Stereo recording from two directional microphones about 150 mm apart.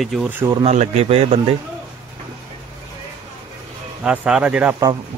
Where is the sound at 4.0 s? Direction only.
5° right (ahead or behind).